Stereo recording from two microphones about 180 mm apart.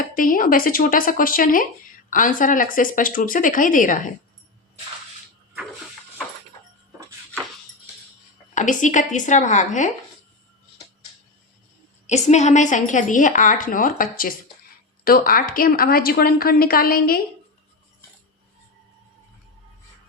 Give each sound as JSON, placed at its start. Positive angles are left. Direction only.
{"t": 0.1, "sound": "a woman's voice", "side_deg": 50}
{"t": 8.5, "sound": "a woman's voice", "side_deg": 45}
{"t": 12.0, "sound": "a woman's voice", "side_deg": 40}